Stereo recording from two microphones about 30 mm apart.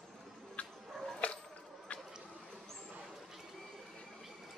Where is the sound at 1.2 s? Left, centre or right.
Left.